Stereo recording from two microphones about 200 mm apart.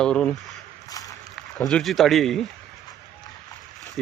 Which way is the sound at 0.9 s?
20° left (ahead or behind).